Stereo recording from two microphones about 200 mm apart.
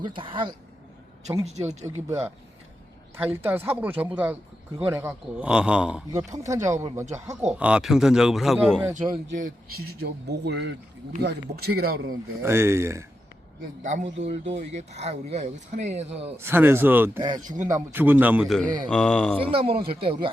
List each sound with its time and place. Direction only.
0.2 s speech: 25° right (ahead or behind)
1.8 s a man's voice: 10° right (ahead or behind)
9.3 s speech: 45° right (ahead or behind)
12.4 s speech: 10° right (ahead or behind)
13.6 s speech: 40° right (ahead or behind)
16.4 s a man's voice: 10° right (ahead or behind); by 19.4 s 5° left (ahead or behind)
19.4 s speech: 30° right (ahead or behind)